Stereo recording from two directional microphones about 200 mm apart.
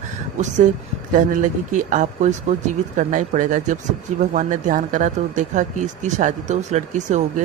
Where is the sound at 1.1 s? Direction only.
40° right (ahead or behind).